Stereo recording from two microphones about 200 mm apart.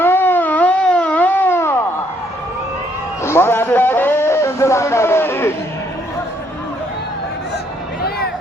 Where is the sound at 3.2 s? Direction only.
10° left (ahead or behind).